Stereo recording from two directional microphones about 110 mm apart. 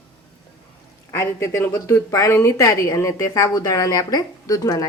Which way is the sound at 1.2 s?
25° left (ahead or behind).